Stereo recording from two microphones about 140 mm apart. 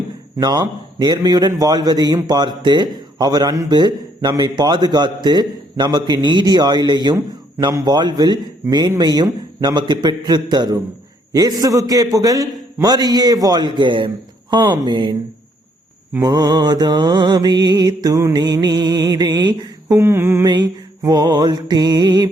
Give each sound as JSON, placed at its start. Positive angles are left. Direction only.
{"t": 0.3, "sound": "a man's voice", "side_deg": -30}
{"t": 16.2, "sound": "a man's voice", "side_deg": -30}
{"t": 20.0, "sound": "a man's voice", "side_deg": -20}
{"t": 20.5, "sound": "a man's voice", "side_deg": -30}